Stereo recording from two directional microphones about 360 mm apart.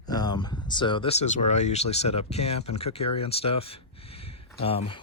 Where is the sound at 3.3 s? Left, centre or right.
Centre.